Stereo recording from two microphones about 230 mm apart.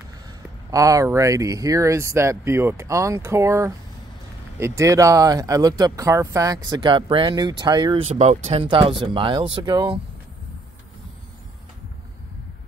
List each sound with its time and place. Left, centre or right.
0.7 s speech: centre